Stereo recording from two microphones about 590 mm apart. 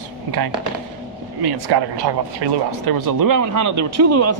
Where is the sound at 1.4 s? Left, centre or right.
Right.